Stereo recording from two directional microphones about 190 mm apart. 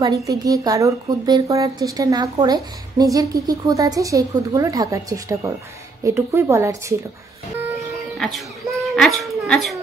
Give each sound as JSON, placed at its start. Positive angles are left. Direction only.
{"t": 0.0, "sound": "a woman's voice", "side_deg": -20}
{"t": 8.8, "sound": "music", "side_deg": 0}